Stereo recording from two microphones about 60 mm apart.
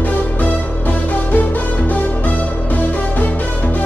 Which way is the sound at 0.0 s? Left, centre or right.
Left.